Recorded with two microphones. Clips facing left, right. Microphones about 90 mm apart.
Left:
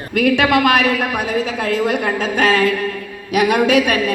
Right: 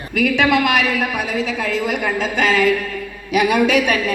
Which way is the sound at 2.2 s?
45° left (ahead or behind).